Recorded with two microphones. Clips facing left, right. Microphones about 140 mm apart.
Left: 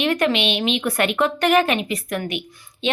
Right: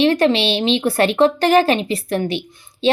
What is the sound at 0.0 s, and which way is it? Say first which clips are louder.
A woman's voice: right 5 dB; 30° right (ahead or behind).